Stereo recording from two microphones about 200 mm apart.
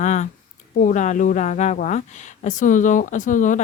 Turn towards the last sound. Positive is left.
turn(degrees=40)  # may be behind; listen again after turning